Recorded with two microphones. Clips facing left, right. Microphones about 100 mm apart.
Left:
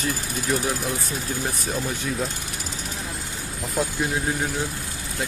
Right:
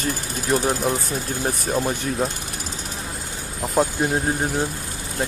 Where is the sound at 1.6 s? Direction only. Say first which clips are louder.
Right 5 dB; 45° right (ahead or behind).